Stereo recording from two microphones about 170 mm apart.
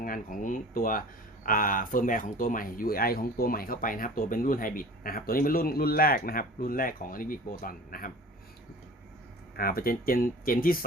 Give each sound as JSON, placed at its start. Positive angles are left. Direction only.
{"t": 0.0, "sound": "speech", "side_deg": 55}
{"t": 9.6, "sound": "speech", "side_deg": 60}